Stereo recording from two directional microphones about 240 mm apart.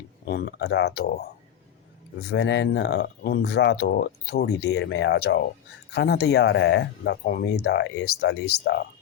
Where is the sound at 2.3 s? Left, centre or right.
Left.